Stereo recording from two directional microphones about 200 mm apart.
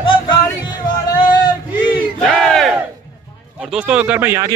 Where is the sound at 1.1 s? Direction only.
20° left (ahead or behind).